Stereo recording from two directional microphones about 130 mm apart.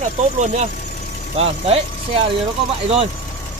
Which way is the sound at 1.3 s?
50° right (ahead or behind).